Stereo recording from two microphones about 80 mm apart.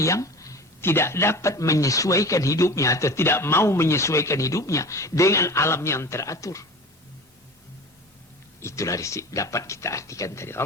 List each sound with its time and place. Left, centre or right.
0.0 s a sound: left
0.8 s a man's voice: left
8.6 s a man's voice: left